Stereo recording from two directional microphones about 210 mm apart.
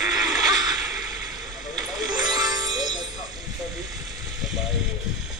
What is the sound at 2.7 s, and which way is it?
Music, 20° right (ahead or behind).